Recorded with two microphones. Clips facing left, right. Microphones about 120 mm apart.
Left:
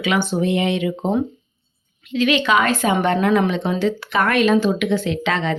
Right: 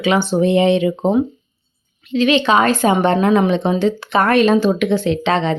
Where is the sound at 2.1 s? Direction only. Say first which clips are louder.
Right 3 dB; 30° right (ahead or behind).